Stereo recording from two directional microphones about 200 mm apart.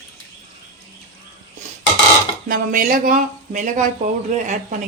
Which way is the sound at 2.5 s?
45° right (ahead or behind).